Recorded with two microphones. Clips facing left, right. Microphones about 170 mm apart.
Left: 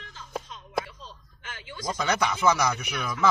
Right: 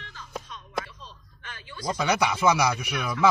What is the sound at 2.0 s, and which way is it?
Speech, 10° right (ahead or behind).